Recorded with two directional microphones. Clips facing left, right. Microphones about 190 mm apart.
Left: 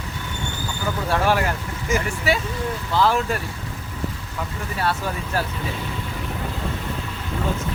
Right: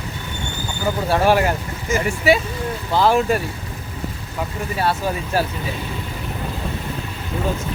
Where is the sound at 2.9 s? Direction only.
15° right (ahead or behind).